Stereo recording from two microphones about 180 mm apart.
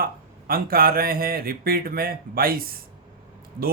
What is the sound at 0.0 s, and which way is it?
Speech, 55° right (ahead or behind).